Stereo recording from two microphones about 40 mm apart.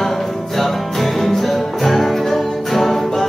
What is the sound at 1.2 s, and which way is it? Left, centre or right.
Music, centre.